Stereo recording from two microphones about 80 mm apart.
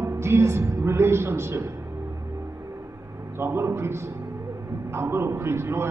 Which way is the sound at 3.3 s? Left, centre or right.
Right.